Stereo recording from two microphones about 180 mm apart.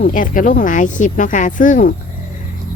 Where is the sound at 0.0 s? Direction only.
50° left (ahead or behind).